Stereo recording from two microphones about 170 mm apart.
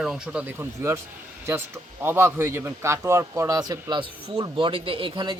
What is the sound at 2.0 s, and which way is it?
A man's voice, 15° right (ahead or behind).